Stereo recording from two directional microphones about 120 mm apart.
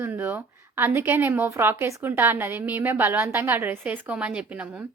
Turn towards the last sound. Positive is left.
turn(degrees=-10)  # may be behind; listen again after turning